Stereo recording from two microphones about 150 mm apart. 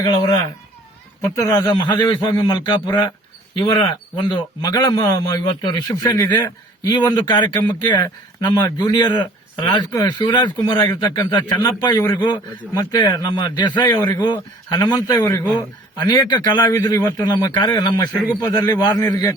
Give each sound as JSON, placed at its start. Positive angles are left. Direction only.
{"t": 1.4, "sound": "a man's voice", "side_deg": 20}